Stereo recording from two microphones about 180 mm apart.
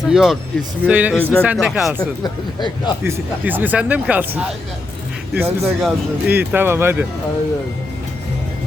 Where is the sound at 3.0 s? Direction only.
10° right (ahead or behind).